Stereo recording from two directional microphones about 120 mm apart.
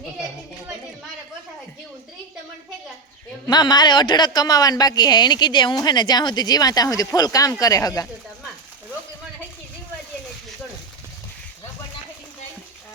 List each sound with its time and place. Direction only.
3.4 s a man's voice: 35° left (ahead or behind)